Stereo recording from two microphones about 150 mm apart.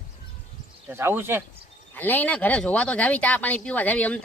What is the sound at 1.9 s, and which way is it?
Speech, 10° left (ahead or behind).